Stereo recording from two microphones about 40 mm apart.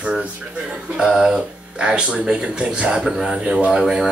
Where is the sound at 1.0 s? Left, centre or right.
Centre.